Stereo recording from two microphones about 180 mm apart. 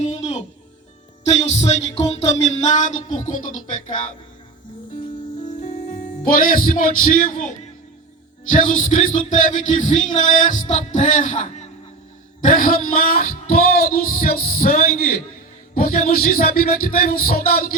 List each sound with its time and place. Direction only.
0.2 s music: 40° left (ahead or behind)
1.2 s speech: 40° left (ahead or behind)
1.7 s music: 35° left (ahead or behind)
6.2 s music: 50° left (ahead or behind)
8.4 s music: 45° left (ahead or behind)
12.4 s speech: 50° left (ahead or behind)